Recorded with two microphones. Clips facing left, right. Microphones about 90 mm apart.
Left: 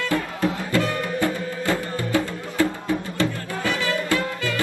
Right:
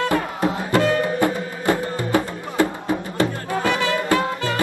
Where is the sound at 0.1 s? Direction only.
20° right (ahead or behind).